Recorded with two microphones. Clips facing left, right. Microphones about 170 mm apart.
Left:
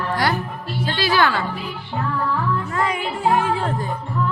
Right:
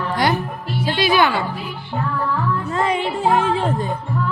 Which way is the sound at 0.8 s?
20° right (ahead or behind).